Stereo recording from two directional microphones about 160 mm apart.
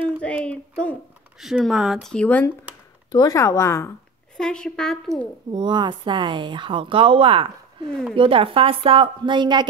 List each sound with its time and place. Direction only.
0.2 s speech: 10° left (ahead or behind)
3.1 s speech: 25° left (ahead or behind)
4.4 s speech: 5° left (ahead or behind)
5.5 s speech: 30° right (ahead or behind)